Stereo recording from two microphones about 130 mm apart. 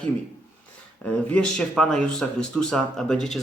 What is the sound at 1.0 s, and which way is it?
Speech, 5° left (ahead or behind).